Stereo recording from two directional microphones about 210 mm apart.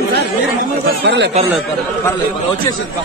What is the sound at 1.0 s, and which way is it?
Speech, 55° right (ahead or behind).